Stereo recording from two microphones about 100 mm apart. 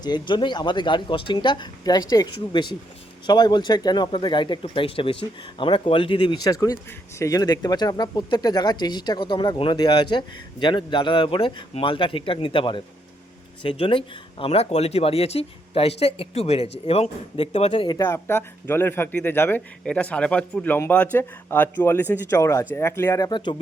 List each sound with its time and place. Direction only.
0.0 s speech: 45° left (ahead or behind)
6.4 s speech: 35° left (ahead or behind); by 17.9 s 60° left (ahead or behind)
18.0 s speech: 25° left (ahead or behind)
19.8 s speech: 10° left (ahead or behind); by 23.3 s 35° left (ahead or behind)
23.3 s speech: 50° left (ahead or behind)